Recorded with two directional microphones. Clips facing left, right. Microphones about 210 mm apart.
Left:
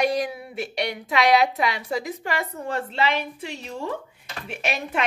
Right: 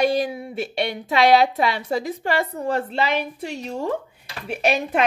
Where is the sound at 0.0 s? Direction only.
30° right (ahead or behind).